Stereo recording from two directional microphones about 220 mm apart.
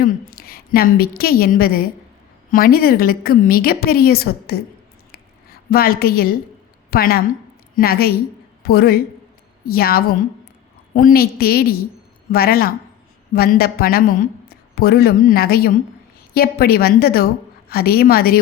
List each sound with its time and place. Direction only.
0.0 s a woman's voice: 45° left (ahead or behind)
5.7 s a woman's voice: 45° left (ahead or behind)